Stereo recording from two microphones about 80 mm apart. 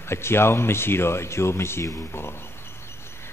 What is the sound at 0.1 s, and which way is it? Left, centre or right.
A man's voice, left.